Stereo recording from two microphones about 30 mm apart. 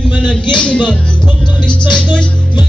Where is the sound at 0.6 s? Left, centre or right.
Left.